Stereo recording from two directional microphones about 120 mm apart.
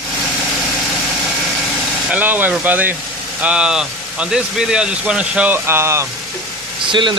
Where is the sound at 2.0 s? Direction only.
15° right (ahead or behind).